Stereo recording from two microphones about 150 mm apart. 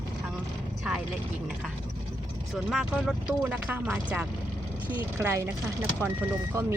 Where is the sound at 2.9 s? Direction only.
5° right (ahead or behind).